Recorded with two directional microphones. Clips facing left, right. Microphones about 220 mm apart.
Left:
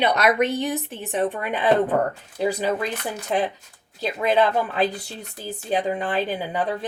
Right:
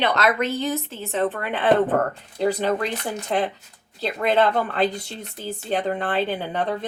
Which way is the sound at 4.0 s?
15° left (ahead or behind).